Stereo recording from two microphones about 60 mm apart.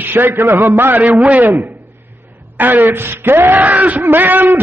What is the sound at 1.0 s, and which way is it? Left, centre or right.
A man's voice, right.